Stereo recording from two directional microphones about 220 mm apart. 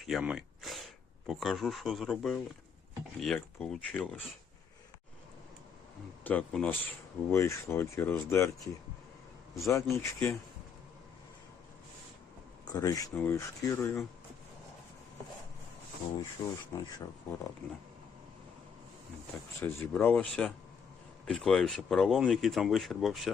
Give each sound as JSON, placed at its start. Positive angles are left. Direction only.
{"t": 0.0, "sound": "gasp", "side_deg": 0}
{"t": 1.3, "sound": "speech", "side_deg": 0}
{"t": 6.2, "sound": "speech", "side_deg": 5}
{"t": 9.6, "sound": "speech", "side_deg": 15}
{"t": 12.7, "sound": "speech", "side_deg": 15}
{"t": 16.4, "sound": "speech", "side_deg": 15}
{"t": 19.6, "sound": "speech", "side_deg": 10}